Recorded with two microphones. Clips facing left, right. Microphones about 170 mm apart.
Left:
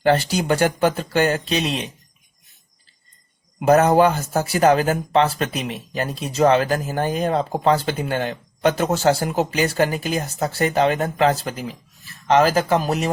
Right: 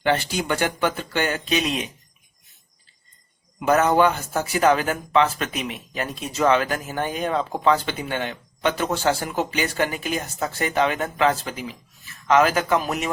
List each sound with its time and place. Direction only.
0.0 s speech: 40° left (ahead or behind)
3.7 s speech: 35° left (ahead or behind)